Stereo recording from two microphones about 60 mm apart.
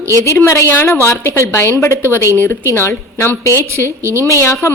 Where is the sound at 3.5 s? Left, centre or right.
Right.